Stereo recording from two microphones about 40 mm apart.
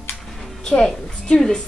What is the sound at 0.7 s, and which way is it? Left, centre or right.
Speech, left.